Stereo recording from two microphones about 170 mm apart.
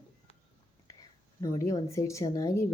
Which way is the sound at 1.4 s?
20° left (ahead or behind).